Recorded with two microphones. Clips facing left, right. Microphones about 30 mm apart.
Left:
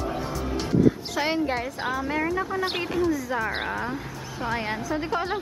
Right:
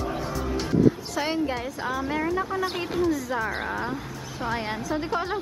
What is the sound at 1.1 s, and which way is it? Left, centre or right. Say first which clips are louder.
A woman's voice: left 1 dB; centre.